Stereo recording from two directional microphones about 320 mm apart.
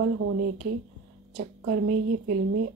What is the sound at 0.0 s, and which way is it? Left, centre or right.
Speech, right.